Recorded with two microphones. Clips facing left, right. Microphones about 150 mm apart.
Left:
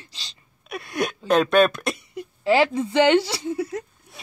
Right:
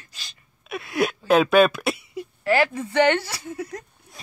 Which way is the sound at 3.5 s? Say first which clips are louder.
Left 3 dB; 25° left (ahead or behind).